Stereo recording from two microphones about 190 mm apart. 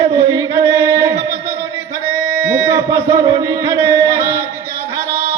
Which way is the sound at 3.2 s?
20° right (ahead or behind).